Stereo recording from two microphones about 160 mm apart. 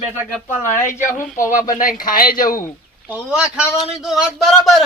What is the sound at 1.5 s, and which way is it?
A man's voice, 55° left (ahead or behind).